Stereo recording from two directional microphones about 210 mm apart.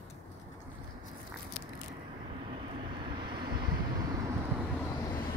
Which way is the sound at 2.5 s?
20° right (ahead or behind).